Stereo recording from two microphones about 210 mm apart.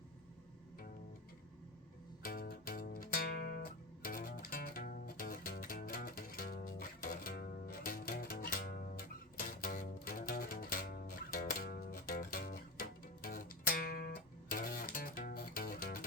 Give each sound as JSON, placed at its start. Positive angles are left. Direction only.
{"t": 2.2, "sound": "music", "side_deg": 45}